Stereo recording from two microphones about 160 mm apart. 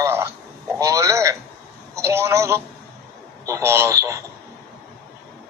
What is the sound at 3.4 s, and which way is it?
Speech, 20° right (ahead or behind).